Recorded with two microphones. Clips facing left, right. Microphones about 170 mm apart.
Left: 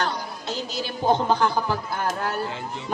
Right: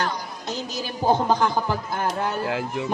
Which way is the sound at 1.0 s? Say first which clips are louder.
Right 1 dB; 15° right (ahead or behind).